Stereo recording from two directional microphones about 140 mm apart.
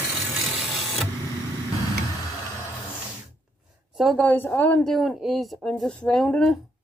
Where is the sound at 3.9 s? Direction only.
Centre (ahead or behind).